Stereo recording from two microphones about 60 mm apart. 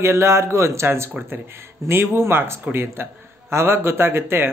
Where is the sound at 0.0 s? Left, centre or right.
Right.